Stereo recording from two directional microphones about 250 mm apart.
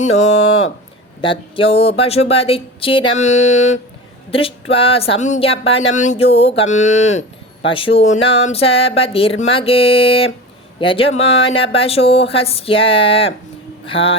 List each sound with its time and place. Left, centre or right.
1.2 s speech: left